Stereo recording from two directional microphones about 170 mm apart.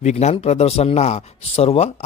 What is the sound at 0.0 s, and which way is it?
Speech, 40° left (ahead or behind).